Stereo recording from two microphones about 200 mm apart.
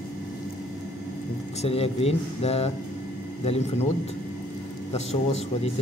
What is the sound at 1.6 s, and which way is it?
Speech, 30° left (ahead or behind).